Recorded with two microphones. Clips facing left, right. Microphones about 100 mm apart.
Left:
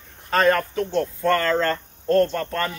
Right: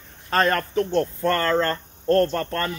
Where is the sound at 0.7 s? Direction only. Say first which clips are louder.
Right 2 dB; 35° right (ahead or behind).